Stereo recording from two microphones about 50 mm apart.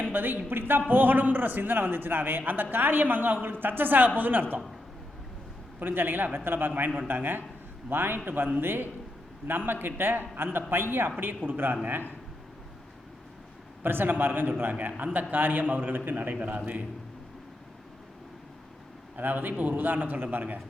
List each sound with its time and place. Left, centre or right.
0.0 s a sound: right
0.5 s a man's voice: right
5.8 s a man's voice: right
8.2 s a man's voice: right
8.6 s a man's voice: right
13.8 s a man's voice: right
19.1 s a man's voice: right